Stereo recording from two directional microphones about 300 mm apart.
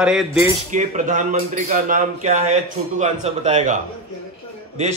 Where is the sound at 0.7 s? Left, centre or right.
Right.